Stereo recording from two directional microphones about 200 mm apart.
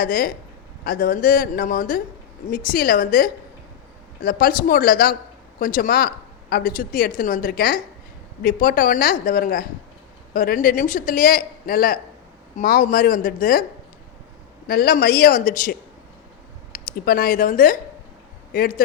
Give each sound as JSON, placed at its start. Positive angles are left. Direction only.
{"t": 0.0, "sound": "speech", "side_deg": 45}
{"t": 14.7, "sound": "speech", "side_deg": 50}
{"t": 16.7, "sound": "speech", "side_deg": 45}